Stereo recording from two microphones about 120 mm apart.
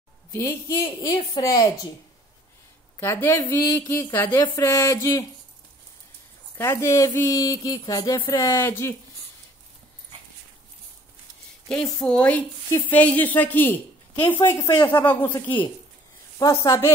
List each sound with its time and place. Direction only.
0.8 s a woman's voice: 40° left (ahead or behind)
3.0 s speech: 25° left (ahead or behind)
6.6 s speech: 25° left (ahead or behind)
8.5 s speech: 20° left (ahead or behind)
11.7 s a woman's voice: 10° left (ahead or behind)
16.3 s speech: 30° left (ahead or behind)